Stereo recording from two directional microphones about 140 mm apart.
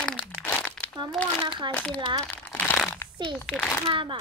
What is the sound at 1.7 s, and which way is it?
Speech, 10° left (ahead or behind).